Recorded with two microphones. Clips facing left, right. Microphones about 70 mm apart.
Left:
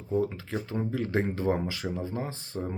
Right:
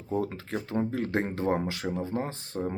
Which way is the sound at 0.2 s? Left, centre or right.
Right.